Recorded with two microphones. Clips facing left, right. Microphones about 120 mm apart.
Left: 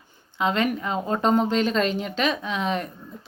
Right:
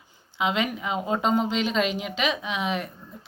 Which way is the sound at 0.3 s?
5° right (ahead or behind).